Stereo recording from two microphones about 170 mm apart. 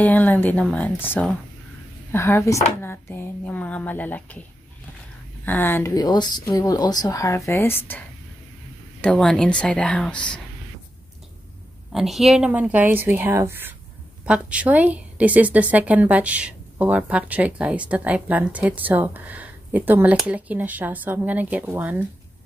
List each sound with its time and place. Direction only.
0.0 s speech: 10° left (ahead or behind)
5.4 s speech: 10° left (ahead or behind)
5.9 s speech: 25° left (ahead or behind)
9.0 s speech: 5° left (ahead or behind)
11.9 s a woman's voice: centre (ahead or behind)